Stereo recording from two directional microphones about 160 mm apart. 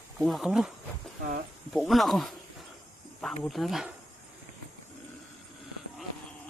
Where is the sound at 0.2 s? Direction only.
Centre (ahead or behind).